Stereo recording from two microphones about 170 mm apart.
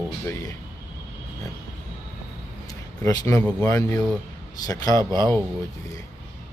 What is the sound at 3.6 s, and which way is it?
A man's voice, 15° left (ahead or behind).